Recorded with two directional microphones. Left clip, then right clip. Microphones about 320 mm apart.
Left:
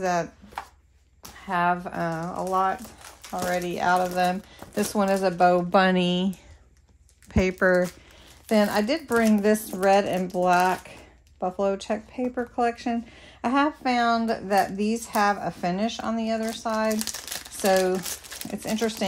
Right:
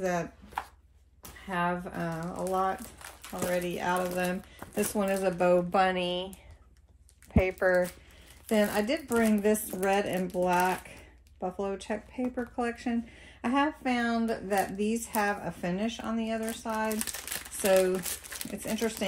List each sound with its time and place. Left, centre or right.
0.0 s a woman's voice: left
1.5 s a woman's voice: left
7.3 s a woman's voice: left
17.9 s speech: centre
18.7 s a woman's voice: left